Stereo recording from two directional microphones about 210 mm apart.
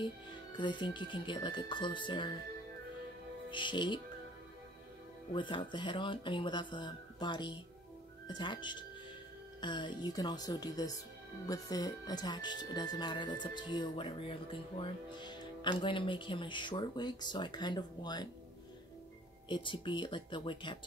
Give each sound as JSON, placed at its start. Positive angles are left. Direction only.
{"t": 0.0, "sound": "speech", "side_deg": 20}
{"t": 3.4, "sound": "speech", "side_deg": 20}
{"t": 5.3, "sound": "speech", "side_deg": 25}
{"t": 19.5, "sound": "speech", "side_deg": 25}